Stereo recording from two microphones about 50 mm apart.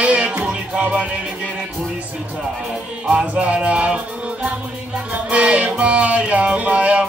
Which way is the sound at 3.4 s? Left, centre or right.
Right.